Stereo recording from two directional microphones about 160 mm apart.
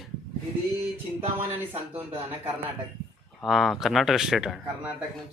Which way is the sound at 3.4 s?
Centre (ahead or behind).